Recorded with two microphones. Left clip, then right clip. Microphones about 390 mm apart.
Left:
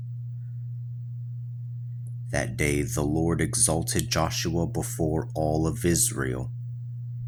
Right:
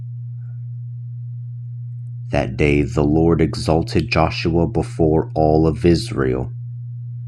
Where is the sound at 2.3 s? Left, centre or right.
Left.